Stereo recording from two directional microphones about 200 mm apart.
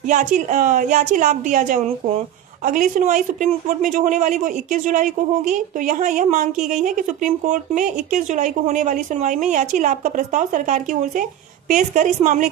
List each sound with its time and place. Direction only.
0.0 s speech: 40° right (ahead or behind)